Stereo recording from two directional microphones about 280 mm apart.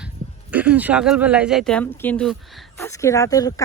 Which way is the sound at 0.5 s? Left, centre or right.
Centre.